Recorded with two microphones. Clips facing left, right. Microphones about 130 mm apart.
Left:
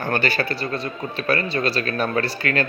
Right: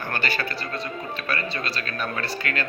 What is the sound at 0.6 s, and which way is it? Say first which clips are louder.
Speech: left 4 dB; 30° left (ahead or behind).